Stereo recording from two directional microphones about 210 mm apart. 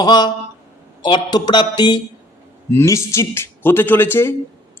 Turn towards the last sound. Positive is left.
turn(degrees=10)  # may be behind; listen again after turning